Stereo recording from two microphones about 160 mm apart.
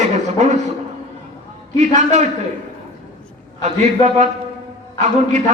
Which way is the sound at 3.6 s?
45° right (ahead or behind).